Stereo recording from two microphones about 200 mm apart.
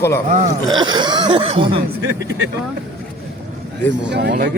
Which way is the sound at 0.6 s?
20° right (ahead or behind).